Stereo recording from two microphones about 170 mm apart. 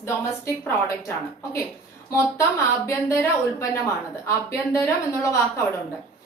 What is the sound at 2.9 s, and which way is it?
Speech, 15° left (ahead or behind).